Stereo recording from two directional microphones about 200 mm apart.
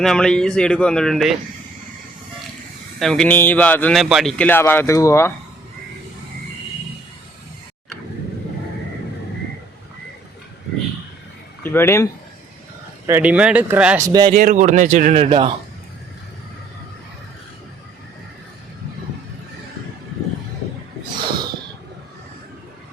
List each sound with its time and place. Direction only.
0.0 s speech: 5° left (ahead or behind)
3.0 s a man's voice: 5° left (ahead or behind)
11.6 s a man's voice: 10° left (ahead or behind)
13.1 s speech: 10° right (ahead or behind)
14.3 s speech: 40° right (ahead or behind)